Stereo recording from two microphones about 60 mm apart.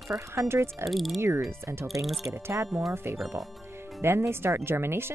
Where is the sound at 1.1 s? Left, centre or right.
Right.